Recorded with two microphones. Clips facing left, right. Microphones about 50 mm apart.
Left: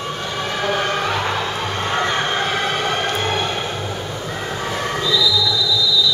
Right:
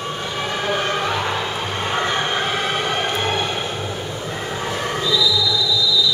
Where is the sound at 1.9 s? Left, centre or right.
Centre.